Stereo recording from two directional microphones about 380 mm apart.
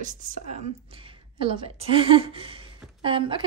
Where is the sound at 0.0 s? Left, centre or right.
Centre.